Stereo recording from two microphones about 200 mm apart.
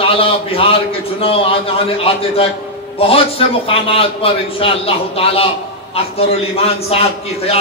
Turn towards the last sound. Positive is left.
turn(degrees=30)  # may be behind; listen again after turning